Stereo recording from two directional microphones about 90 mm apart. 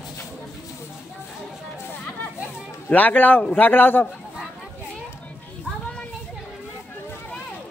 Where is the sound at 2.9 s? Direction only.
20° left (ahead or behind).